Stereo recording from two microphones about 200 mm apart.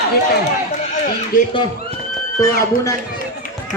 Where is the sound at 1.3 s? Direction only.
45° left (ahead or behind).